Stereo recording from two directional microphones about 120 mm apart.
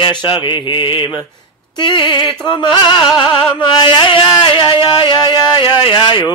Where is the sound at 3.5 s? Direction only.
45° left (ahead or behind).